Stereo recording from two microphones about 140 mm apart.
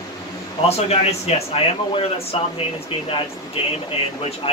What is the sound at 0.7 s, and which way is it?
Speech, 50° left (ahead or behind).